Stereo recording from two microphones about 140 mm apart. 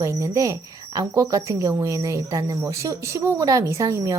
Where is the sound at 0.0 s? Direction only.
20° right (ahead or behind).